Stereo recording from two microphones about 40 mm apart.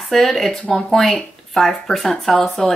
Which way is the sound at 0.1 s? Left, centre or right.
Centre.